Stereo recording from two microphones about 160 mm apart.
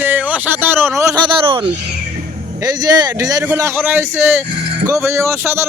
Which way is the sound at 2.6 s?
25° right (ahead or behind).